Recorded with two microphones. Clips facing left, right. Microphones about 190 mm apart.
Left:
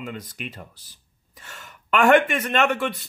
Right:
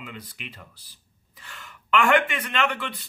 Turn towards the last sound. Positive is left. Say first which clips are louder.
# left 5 dB
turn(degrees=45)  # may be behind; listen again after turning